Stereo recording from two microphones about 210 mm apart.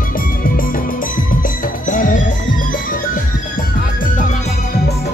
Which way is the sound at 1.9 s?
40° left (ahead or behind).